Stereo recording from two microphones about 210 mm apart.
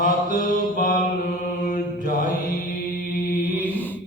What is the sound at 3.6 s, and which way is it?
Mantra, 10° left (ahead or behind).